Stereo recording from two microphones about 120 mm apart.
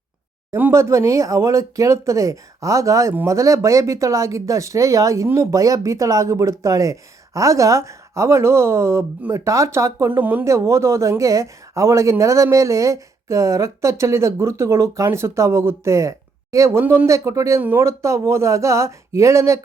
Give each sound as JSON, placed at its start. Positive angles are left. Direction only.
{"t": 0.5, "sound": "speech", "side_deg": -20}